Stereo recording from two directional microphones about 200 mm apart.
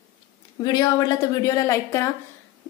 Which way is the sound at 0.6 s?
20° left (ahead or behind).